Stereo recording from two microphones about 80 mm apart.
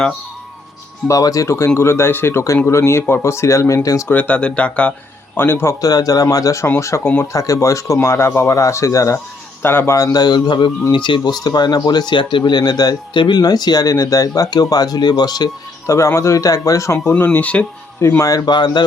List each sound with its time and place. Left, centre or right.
1.0 s speech: left
4.1 s speech: centre
5.4 s speech: left
5.8 s speech: left
9.6 s speech: left
10.0 s speech: left
10.9 s speech: left
11.4 s speech: left
13.1 s speech: left
13.4 s speech: left
15.9 s speech: left
17.1 s speech: left
18.2 s speech: left